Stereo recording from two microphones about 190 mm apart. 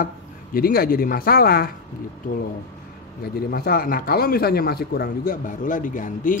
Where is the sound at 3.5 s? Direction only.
50° left (ahead or behind).